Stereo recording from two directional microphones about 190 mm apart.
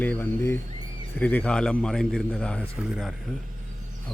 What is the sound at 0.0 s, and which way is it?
A man's voice, 10° left (ahead or behind).